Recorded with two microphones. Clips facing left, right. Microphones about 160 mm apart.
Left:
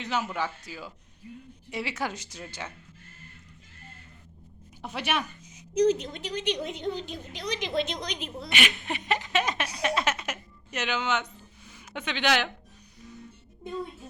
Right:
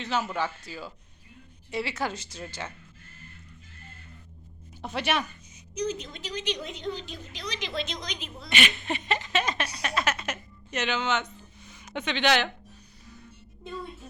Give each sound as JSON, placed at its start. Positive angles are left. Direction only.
{"t": 0.0, "sound": "a woman's voice", "side_deg": 15}
{"t": 4.8, "sound": "a woman's voice", "side_deg": 10}
{"t": 5.7, "sound": "a woman's voice", "side_deg": 90}
{"t": 8.4, "sound": "speech", "side_deg": 10}
{"t": 9.8, "sound": "a sound", "side_deg": 20}